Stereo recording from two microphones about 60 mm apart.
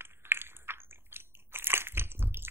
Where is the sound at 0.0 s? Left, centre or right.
Right.